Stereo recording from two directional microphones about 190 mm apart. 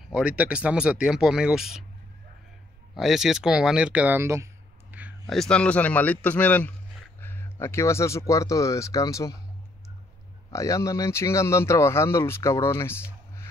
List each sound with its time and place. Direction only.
0.1 s speech: 5° right (ahead or behind)
2.9 s a man's voice: centre (ahead or behind); by 9.4 s 15° left (ahead or behind)
10.5 s speech: 15° left (ahead or behind)